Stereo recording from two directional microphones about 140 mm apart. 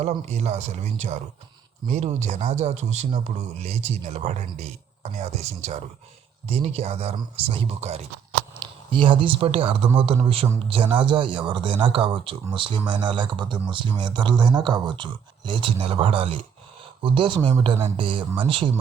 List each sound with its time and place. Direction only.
0.0 s speech: 55° right (ahead or behind)
8.9 s speech: 40° right (ahead or behind)